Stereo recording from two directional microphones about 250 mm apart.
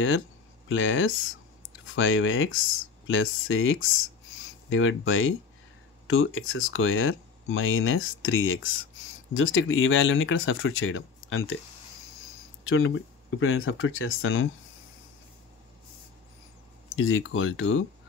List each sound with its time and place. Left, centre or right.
0.7 s speech: left
12.6 s speech: left
16.9 s speech: left